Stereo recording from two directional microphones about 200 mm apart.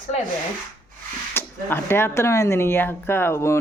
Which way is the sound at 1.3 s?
10° left (ahead or behind).